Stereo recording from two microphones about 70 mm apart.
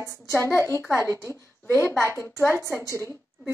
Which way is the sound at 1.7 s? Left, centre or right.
Left.